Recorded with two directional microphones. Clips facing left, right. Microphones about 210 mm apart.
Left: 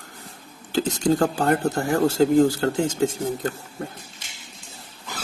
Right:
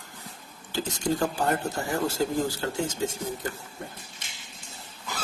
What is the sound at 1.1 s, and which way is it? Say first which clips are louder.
Speech: left 5 dB; 65° left (ahead or behind).